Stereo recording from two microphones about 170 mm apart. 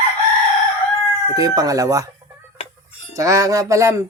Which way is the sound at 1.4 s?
20° right (ahead or behind).